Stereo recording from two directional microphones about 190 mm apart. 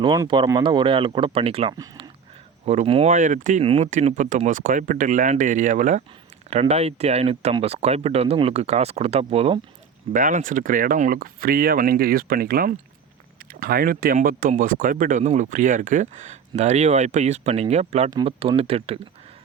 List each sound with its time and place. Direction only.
0.0 s speech: 25° right (ahead or behind); by 3.6 s 40° right (ahead or behind)
3.6 s speech: 30° right (ahead or behind)
3.8 s speech: 40° right (ahead or behind)
10.1 s speech: 45° right (ahead or behind)